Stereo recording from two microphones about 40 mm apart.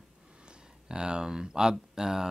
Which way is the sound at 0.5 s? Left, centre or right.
Right.